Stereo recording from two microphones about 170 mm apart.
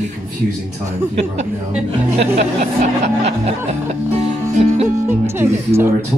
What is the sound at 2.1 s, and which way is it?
Speech, 45° right (ahead or behind).